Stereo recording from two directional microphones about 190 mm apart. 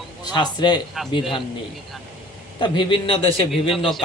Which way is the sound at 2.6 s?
25° left (ahead or behind).